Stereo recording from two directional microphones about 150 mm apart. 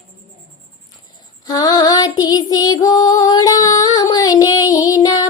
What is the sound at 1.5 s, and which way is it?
Female singing, 25° left (ahead or behind).